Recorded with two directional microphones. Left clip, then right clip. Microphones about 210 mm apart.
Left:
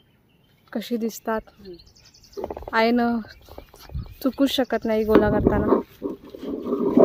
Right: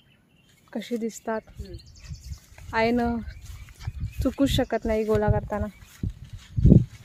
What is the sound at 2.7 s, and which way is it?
Speech, 25° left (ahead or behind).